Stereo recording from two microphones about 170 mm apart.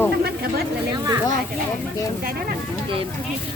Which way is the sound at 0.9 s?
25° right (ahead or behind).